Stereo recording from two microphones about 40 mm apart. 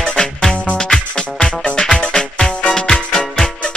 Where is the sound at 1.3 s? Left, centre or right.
Left.